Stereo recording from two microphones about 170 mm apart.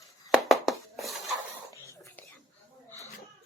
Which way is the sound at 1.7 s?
15° left (ahead or behind).